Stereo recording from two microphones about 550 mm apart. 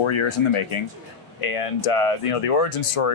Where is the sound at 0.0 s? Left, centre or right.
Left.